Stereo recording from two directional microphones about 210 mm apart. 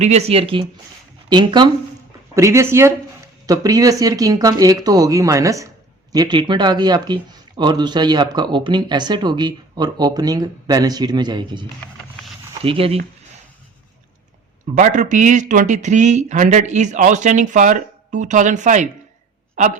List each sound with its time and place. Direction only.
0.0 s speech: 30° right (ahead or behind)
11.8 s a sound: 5° left (ahead or behind)
12.6 s speech: 25° right (ahead or behind)
14.8 s a woman's voice: 35° right (ahead or behind)